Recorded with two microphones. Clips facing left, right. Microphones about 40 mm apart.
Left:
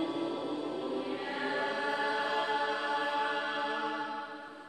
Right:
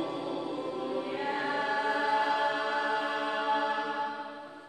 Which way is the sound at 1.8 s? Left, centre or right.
Right.